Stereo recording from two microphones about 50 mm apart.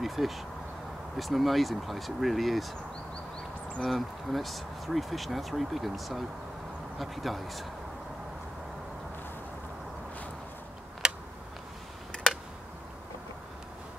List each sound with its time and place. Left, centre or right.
0.0 s speech: centre
3.8 s speech: centre
11.0 s tick: centre
12.1 s tick: centre